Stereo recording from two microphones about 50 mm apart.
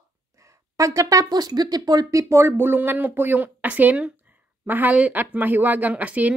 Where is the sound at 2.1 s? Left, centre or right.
Right.